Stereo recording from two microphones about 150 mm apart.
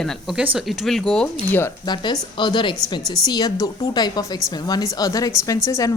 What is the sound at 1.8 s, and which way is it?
A woman's voice, 30° left (ahead or behind).